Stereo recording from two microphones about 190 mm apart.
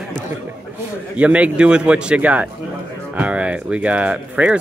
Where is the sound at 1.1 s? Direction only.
5° right (ahead or behind).